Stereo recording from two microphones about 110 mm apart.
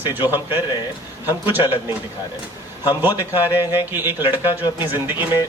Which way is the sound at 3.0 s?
20° right (ahead or behind).